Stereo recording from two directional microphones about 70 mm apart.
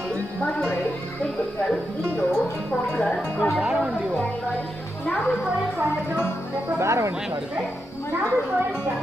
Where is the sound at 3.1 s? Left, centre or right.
Centre.